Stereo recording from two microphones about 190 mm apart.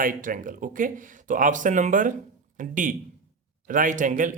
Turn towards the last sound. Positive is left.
turn(degrees=-40)  # may be behind; listen again after turning